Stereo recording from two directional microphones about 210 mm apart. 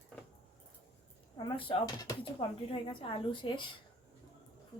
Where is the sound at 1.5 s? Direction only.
25° left (ahead or behind).